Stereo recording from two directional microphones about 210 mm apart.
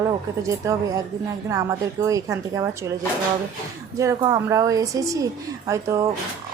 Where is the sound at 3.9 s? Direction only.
15° right (ahead or behind).